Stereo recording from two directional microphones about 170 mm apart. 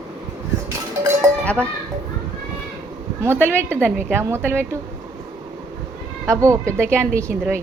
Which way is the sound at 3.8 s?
10° right (ahead or behind).